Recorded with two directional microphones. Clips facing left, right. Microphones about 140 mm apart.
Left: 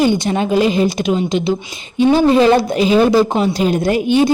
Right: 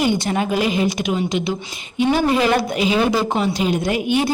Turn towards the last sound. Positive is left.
turn(degrees=30)  # may be behind; listen again after turning